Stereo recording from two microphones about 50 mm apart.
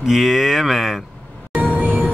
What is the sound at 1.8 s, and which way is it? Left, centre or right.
Music, right.